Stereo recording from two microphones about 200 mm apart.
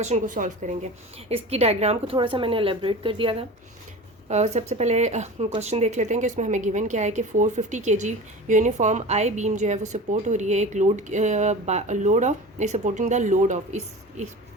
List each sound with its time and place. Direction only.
0.0 s a woman's voice: 40° right (ahead or behind)